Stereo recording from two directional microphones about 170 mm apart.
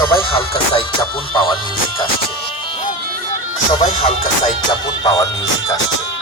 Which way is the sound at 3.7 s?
25° left (ahead or behind).